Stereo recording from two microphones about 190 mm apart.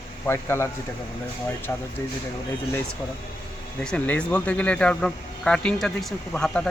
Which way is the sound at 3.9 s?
5° left (ahead or behind).